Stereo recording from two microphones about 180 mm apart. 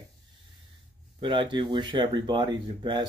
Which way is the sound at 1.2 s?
25° right (ahead or behind).